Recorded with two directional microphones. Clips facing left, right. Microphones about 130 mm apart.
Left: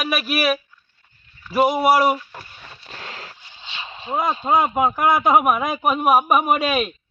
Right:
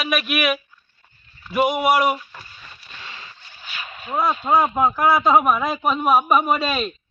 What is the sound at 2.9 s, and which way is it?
Boat, 70° left (ahead or behind).